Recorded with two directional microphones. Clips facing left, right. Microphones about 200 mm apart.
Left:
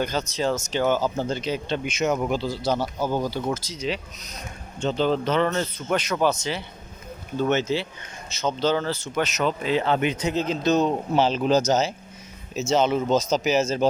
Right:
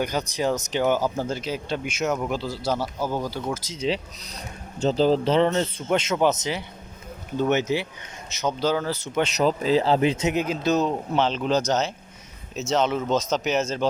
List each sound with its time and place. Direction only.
0.0 s speech: 15° right (ahead or behind)
3.7 s speech: 30° right (ahead or behind); by 9.0 s 10° right (ahead or behind)
9.1 s a man's voice: 30° right (ahead or behind)
10.4 s speech: 10° right (ahead or behind)
11.1 s speech: 5° left (ahead or behind)